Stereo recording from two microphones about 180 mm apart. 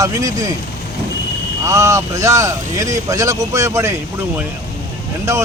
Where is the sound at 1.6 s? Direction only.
15° right (ahead or behind).